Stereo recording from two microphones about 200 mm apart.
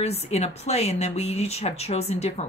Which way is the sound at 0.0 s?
30° left (ahead or behind).